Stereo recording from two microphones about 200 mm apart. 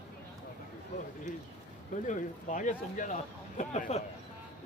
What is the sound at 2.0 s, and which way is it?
Speech, 40° left (ahead or behind).